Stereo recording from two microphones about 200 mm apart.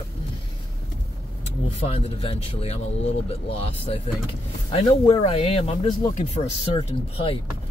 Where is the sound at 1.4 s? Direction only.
30° left (ahead or behind).